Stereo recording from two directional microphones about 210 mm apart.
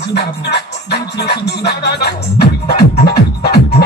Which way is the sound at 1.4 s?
50° left (ahead or behind).